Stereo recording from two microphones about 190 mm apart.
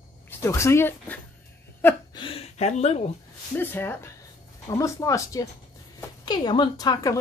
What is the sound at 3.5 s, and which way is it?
Speech, 10° left (ahead or behind).